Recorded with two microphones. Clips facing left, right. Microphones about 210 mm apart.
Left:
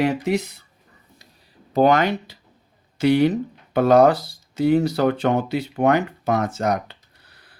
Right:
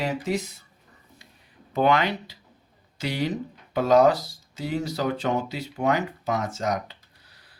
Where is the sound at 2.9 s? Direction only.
60° left (ahead or behind).